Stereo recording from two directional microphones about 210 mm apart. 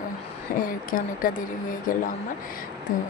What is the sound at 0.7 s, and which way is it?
Speech, 40° left (ahead or behind).